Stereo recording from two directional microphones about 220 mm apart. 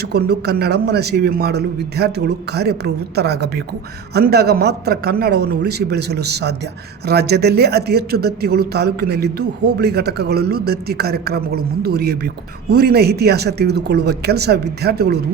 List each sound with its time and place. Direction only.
0.1 s a man's voice: 45° right (ahead or behind)